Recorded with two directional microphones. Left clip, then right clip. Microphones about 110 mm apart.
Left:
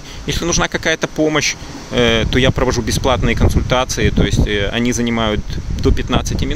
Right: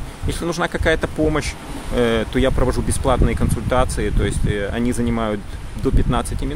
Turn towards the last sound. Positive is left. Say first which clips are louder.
# left 4 dB
turn(degrees=25)  # may be behind; listen again after turning